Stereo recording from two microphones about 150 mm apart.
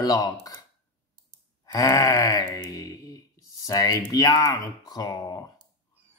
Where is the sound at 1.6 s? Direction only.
20° left (ahead or behind).